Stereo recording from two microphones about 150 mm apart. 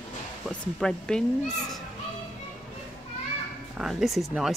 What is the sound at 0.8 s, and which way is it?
Speech, 5° left (ahead or behind).